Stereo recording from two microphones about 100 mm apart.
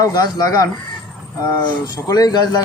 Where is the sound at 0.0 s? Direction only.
40° left (ahead or behind).